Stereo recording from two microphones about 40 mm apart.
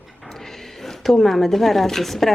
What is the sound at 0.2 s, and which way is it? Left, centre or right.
Speech, centre.